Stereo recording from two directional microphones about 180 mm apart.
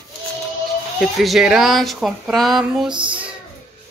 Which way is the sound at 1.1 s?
Centre (ahead or behind).